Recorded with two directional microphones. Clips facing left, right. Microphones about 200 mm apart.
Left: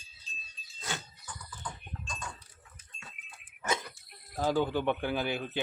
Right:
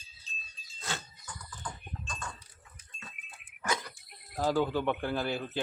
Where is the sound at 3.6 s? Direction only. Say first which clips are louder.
Left 1 dB; 25° left (ahead or behind).